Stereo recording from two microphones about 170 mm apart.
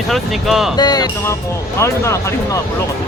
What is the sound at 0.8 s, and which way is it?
Speech, 25° left (ahead or behind).